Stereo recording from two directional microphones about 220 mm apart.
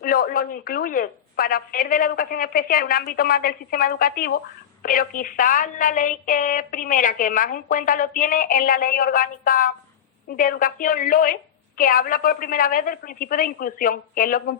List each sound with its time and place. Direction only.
0.0 s a woman's voice: 40° left (ahead or behind)